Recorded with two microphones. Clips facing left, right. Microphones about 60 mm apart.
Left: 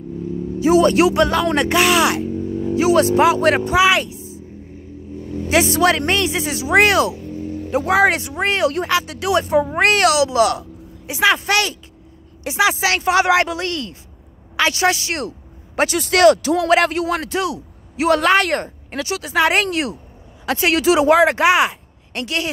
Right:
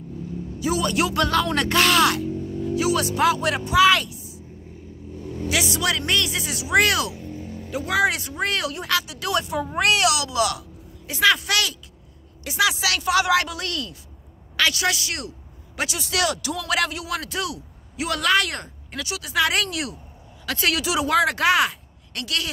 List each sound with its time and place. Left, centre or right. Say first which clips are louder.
0.6 s speech: left 10 dB; left
1.0 s speech: left 6 dB; left
2.1 s speech: left 5 dB; left
3.3 s speech: left 9 dB; left
3.7 s speech: right 3 dB; left
4.1 s a sound: left 7 dB; left
5.5 s speech: left 9 dB; left
9.8 s speech: left 3 dB; left
11.1 s speech: left 4 dB; left
21.1 s speech: left 3 dB; left